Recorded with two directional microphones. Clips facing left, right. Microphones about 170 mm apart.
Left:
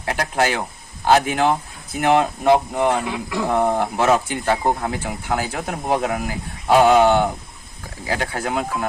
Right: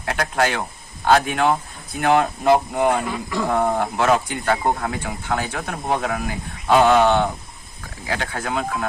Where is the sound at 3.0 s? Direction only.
15° left (ahead or behind).